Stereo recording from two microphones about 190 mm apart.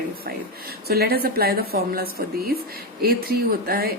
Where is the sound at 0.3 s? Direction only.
55° right (ahead or behind).